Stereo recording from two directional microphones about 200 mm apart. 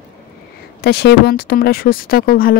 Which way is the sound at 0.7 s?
55° left (ahead or behind).